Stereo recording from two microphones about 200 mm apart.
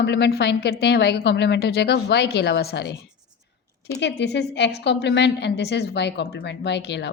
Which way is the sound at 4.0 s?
60° left (ahead or behind).